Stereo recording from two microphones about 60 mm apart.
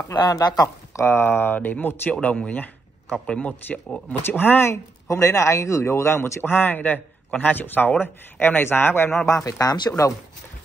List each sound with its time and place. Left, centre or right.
0.1 s speech: left
1.0 s speech: left
5.1 s speech: left
6.4 s speech: left
9.3 s speech: left